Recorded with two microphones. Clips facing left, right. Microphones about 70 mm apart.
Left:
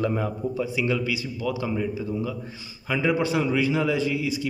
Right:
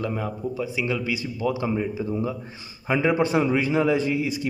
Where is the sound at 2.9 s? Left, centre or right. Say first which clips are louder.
Right 2 dB; right.